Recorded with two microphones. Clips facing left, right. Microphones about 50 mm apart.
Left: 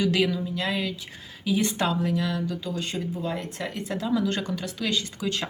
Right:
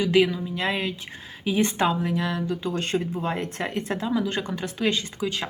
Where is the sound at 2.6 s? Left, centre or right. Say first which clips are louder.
Right 4 dB; right.